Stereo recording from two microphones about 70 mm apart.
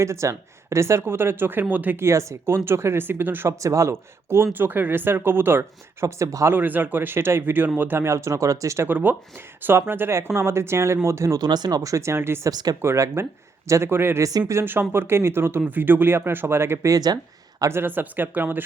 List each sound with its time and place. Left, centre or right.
0.0 s speech: right
2.0 s speech: right
3.5 s speech: right
6.5 s speech: right
8.9 s speech: right
11.3 s speech: right
11.8 s speech: right
12.5 s speech: right
12.8 s speech: right
14.2 s speech: right
14.5 s speech: right
16.9 s speech: right
17.7 s speech: right